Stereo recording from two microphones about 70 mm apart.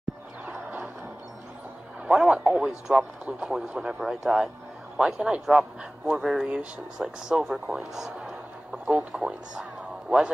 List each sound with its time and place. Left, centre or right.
2.0 s a man's voice: centre